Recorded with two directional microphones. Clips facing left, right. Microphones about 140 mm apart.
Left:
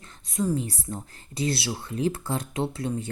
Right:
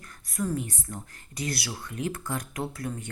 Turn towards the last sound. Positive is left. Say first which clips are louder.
# left 5 dB
turn(degrees=25)  # may be behind; listen again after turning